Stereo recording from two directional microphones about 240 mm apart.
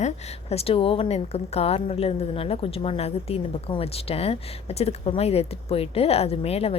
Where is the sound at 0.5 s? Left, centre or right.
Left.